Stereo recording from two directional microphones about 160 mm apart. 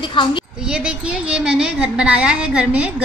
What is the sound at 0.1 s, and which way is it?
Speech, 30° left (ahead or behind).